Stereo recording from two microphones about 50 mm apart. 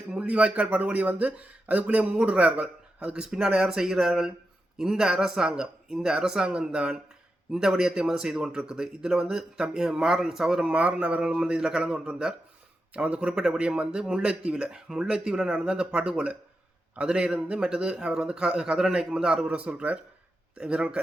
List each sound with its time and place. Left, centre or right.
0.1 s a man's voice: right
10.7 s a man's voice: right
12.9 s a man's voice: right